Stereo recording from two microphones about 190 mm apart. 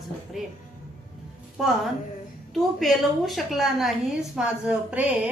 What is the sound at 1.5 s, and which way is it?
A woman's voice, centre (ahead or behind).